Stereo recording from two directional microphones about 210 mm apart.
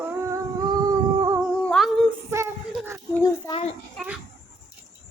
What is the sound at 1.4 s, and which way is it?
Humming, centre (ahead or behind).